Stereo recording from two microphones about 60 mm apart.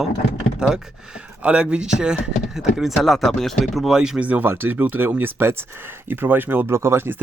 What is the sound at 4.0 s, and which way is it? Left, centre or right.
Speech, centre.